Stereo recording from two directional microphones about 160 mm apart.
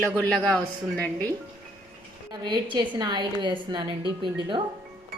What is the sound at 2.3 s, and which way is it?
A woman's voice, 25° right (ahead or behind).